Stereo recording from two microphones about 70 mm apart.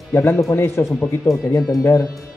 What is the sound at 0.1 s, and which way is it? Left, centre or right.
Speech, left.